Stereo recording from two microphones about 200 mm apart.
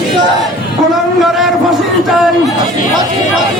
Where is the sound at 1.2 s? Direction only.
Centre (ahead or behind).